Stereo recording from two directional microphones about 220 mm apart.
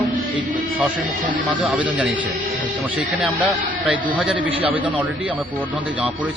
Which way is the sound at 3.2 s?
5° right (ahead or behind).